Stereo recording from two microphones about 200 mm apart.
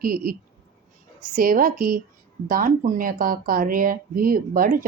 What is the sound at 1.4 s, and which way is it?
Speech, 45° right (ahead or behind).